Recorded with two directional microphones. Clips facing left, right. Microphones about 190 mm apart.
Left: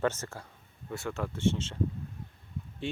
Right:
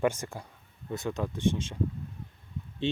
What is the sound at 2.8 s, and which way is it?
Speech, 20° right (ahead or behind).